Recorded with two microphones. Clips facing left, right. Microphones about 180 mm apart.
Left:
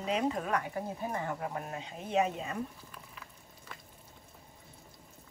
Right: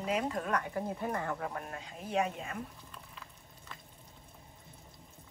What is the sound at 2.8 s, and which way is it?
Boiling, 5° left (ahead or behind).